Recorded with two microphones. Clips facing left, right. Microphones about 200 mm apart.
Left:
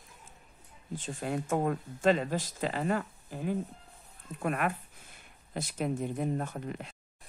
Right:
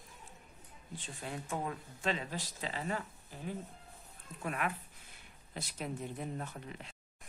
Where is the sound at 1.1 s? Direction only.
50° left (ahead or behind).